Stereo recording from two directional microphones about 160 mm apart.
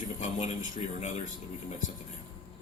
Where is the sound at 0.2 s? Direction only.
50° left (ahead or behind).